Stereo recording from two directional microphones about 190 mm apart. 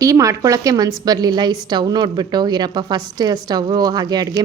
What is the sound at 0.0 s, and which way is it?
Speech, 15° right (ahead or behind).